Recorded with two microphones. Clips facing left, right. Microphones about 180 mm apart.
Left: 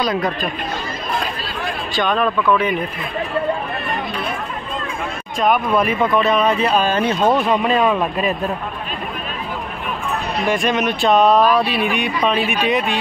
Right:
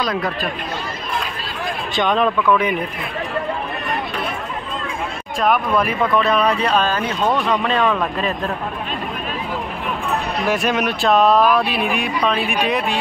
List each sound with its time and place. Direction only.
2.0 s speech: 20° right (ahead or behind)
5.4 s speech: centre (ahead or behind)
6.9 s speech: 25° left (ahead or behind)
10.5 s speech: 5° right (ahead or behind)